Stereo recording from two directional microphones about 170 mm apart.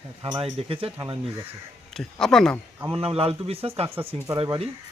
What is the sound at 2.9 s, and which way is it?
Speech, 35° right (ahead or behind).